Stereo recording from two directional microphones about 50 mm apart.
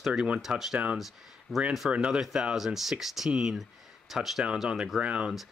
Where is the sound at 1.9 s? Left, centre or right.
Right.